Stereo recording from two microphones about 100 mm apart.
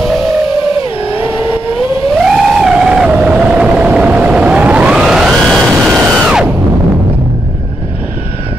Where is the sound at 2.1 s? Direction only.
5° right (ahead or behind).